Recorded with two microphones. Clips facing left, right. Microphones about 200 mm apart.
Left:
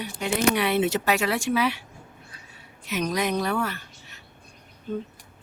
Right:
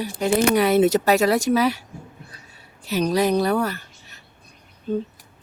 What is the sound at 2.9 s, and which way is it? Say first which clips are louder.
Speech: right 6 dB; 35° right (ahead or behind).